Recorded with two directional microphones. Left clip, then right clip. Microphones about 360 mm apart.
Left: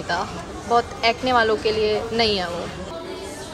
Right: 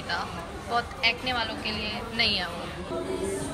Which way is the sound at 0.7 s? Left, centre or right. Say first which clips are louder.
Left 6 dB; centre.